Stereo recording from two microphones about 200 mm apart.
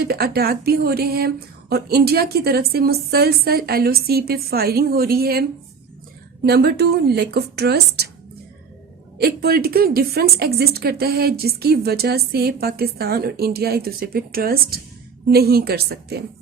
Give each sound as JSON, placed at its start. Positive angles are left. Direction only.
{"t": 0.0, "sound": "a woman's voice", "side_deg": -50}
{"t": 9.1, "sound": "a woman's voice", "side_deg": -50}